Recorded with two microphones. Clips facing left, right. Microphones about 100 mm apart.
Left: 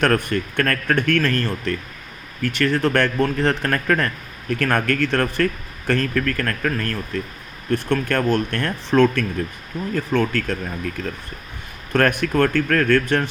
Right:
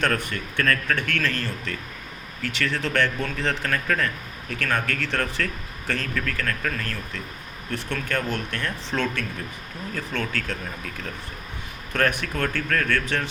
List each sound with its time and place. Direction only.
0.0 s speech: 55° left (ahead or behind)
11.9 s speech: 55° left (ahead or behind)